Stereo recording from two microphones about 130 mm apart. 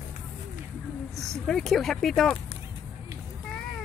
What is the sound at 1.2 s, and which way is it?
Speech, centre (ahead or behind).